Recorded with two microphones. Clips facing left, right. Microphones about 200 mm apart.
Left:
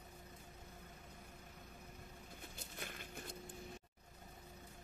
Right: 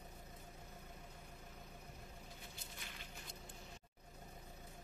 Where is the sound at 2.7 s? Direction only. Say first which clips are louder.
Left 5 dB; 50° left (ahead or behind).